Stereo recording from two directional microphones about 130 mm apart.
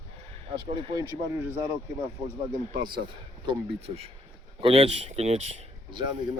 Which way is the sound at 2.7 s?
35° right (ahead or behind).